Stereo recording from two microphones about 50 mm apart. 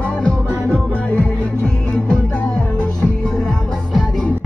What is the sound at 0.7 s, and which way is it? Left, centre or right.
Music, left.